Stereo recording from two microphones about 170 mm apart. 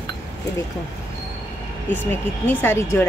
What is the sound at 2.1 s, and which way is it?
Speech, 15° left (ahead or behind).